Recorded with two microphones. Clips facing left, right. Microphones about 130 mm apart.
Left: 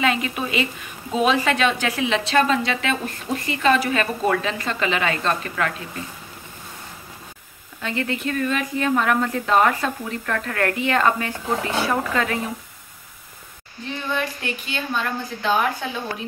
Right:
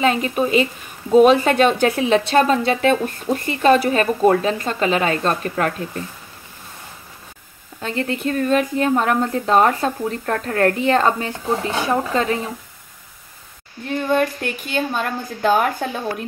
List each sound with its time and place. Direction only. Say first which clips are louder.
0.0 s a woman's voice: right 5 dB; 40° right (ahead or behind)
7.8 s a woman's voice: right 3 dB; 35° right (ahead or behind)
13.8 s a woman's voice: right 8 dB; 45° right (ahead or behind)